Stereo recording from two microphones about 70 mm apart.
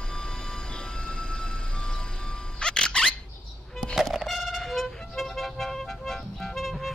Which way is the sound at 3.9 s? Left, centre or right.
Centre.